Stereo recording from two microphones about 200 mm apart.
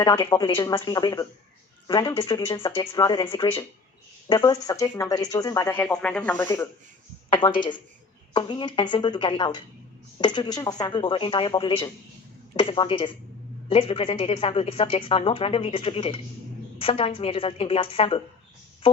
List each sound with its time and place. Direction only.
0.0 s speech: 20° left (ahead or behind)